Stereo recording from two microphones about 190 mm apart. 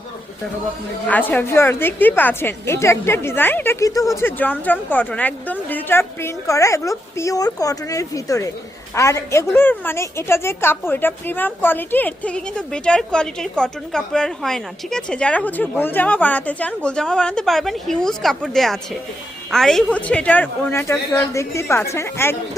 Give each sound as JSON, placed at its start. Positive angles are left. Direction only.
{"t": 1.0, "sound": "a woman's voice", "side_deg": 5}